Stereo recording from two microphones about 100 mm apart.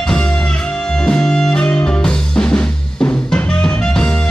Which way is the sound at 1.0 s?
5° left (ahead or behind).